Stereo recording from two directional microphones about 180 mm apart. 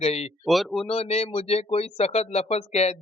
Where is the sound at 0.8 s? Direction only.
35° left (ahead or behind).